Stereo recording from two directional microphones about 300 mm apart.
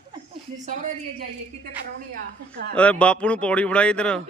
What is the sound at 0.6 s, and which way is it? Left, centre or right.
Speech, right.